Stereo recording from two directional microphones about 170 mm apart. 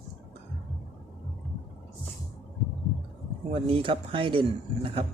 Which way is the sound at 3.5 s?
35° right (ahead or behind).